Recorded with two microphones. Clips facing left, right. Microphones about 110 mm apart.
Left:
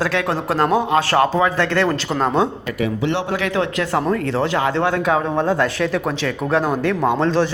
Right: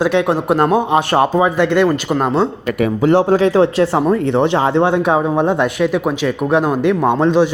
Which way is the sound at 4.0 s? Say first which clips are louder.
Right 3 dB; 20° right (ahead or behind).